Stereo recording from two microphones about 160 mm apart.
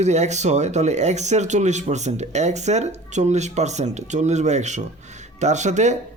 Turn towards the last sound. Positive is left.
turn(degrees=-45)  # may be behind; listen again after turning